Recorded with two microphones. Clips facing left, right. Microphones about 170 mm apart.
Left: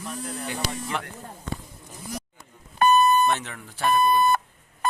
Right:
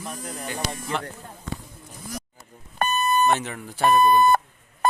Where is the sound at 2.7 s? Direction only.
45° right (ahead or behind).